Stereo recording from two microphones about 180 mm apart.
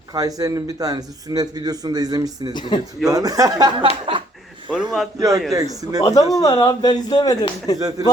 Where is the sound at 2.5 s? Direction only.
25° left (ahead or behind).